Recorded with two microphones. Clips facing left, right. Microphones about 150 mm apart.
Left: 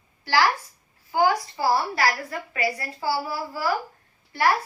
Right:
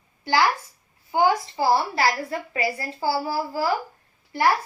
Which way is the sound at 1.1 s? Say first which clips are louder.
Right 1 dB; 25° right (ahead or behind).